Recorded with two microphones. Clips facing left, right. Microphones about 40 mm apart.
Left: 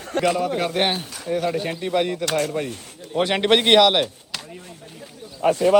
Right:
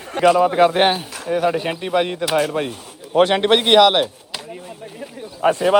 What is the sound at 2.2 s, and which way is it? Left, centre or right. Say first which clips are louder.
Speech: right 4 dB; centre.